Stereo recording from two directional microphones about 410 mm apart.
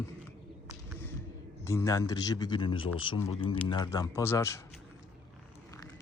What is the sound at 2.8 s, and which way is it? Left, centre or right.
Speech, left.